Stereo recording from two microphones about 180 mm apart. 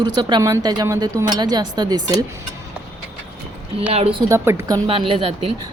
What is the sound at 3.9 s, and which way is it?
Speech, 35° right (ahead or behind).